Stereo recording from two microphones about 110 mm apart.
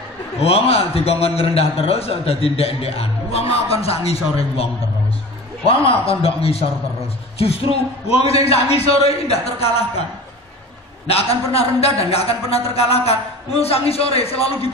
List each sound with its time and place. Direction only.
0.4 s a man's voice: 65° left (ahead or behind)
5.7 s a man's voice: 60° left (ahead or behind)
11.1 s a man's voice: 65° left (ahead or behind)